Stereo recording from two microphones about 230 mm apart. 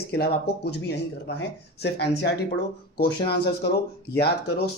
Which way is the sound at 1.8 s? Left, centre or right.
Left.